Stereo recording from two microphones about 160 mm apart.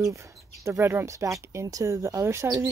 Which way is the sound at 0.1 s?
20° right (ahead or behind).